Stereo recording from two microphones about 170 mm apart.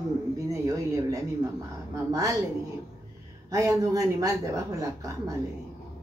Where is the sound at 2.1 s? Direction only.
20° right (ahead or behind).